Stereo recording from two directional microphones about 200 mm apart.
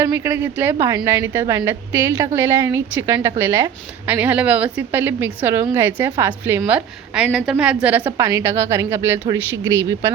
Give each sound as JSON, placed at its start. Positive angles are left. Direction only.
{"t": 0.0, "sound": "a woman's voice", "side_deg": -10}